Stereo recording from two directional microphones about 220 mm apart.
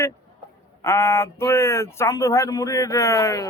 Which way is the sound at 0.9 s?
15° left (ahead or behind).